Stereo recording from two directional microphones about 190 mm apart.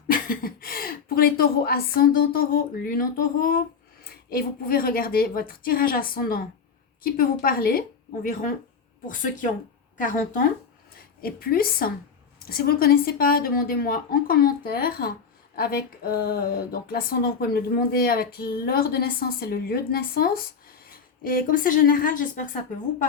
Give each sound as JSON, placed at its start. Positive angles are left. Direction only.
{"t": 0.1, "sound": "speech", "side_deg": 50}
{"t": 10.9, "sound": "a woman's voice", "side_deg": 50}